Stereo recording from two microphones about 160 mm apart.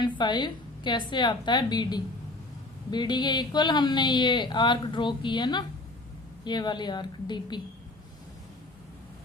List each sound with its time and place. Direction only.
0.0 s speech: 30° left (ahead or behind)